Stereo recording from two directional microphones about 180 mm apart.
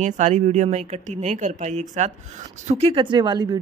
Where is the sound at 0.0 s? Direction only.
40° right (ahead or behind).